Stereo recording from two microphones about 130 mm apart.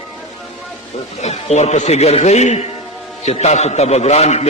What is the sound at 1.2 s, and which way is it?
A man's voice, 55° left (ahead or behind).